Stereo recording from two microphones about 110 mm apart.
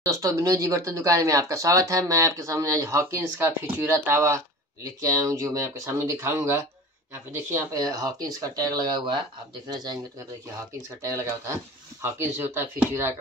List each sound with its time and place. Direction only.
0.0 s speech: 30° right (ahead or behind)
7.7 s speech: 35° right (ahead or behind)
11.0 s speech: 30° right (ahead or behind)